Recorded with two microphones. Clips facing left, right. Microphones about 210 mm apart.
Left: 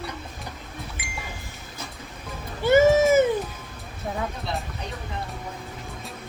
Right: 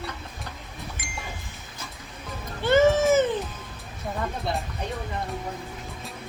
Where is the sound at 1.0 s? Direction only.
45° right (ahead or behind).